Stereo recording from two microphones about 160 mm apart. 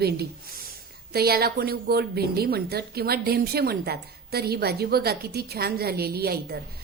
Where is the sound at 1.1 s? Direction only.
75° right (ahead or behind).